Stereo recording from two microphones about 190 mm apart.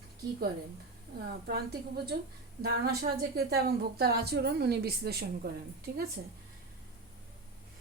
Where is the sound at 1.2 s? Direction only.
55° right (ahead or behind).